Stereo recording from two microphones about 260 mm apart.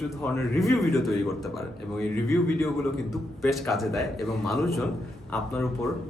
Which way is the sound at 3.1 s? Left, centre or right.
Centre.